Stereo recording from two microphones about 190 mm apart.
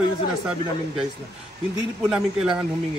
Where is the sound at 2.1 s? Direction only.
5° right (ahead or behind).